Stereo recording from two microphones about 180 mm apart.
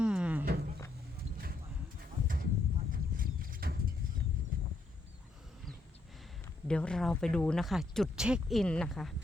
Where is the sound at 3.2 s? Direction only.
55° right (ahead or behind).